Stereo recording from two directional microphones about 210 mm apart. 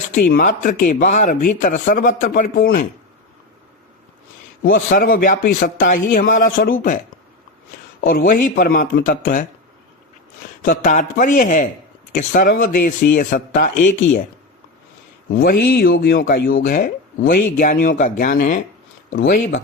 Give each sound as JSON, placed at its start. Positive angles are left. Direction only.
{"t": 0.2, "sound": "speech", "side_deg": 40}
{"t": 4.6, "sound": "speech", "side_deg": 45}
{"t": 8.1, "sound": "speech", "side_deg": 40}
{"t": 10.6, "sound": "speech", "side_deg": 40}
{"t": 15.3, "sound": "speech", "side_deg": 45}